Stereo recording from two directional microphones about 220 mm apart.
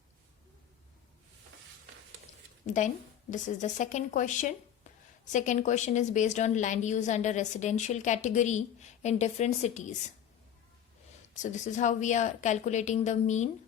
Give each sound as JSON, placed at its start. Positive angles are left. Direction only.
{"t": 2.6, "sound": "a woman's voice", "side_deg": 35}
{"t": 11.6, "sound": "a woman's voice", "side_deg": 35}